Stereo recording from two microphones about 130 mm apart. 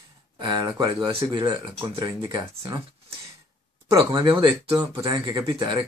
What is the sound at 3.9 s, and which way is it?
Speech, 30° right (ahead or behind).